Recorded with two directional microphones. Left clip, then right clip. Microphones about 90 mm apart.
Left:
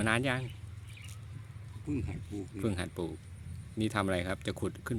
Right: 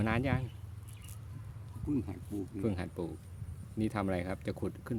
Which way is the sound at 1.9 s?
40° right (ahead or behind).